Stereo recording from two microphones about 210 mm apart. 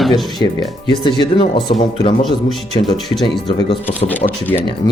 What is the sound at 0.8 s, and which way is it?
Speech, 20° left (ahead or behind).